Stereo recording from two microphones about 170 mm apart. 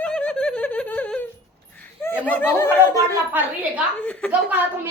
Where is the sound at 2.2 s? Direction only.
10° left (ahead or behind).